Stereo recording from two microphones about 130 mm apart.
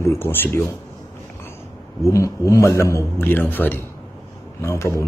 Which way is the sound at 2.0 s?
25° left (ahead or behind).